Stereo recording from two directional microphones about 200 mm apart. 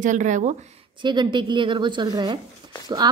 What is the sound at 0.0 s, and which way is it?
Speech, 40° right (ahead or behind).